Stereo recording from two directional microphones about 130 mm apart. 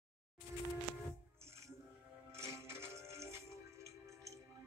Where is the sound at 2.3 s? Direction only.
20° right (ahead or behind).